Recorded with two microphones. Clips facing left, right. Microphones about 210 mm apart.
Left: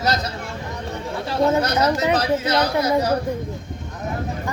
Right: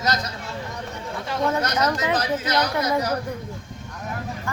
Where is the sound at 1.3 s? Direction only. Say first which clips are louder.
Left 5 dB; 30° left (ahead or behind).